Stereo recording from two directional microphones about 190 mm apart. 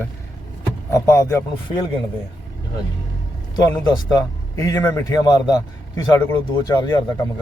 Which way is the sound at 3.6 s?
25° left (ahead or behind).